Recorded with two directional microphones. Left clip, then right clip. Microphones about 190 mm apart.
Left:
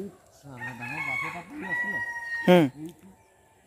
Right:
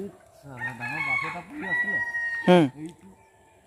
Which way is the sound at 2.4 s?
10° left (ahead or behind).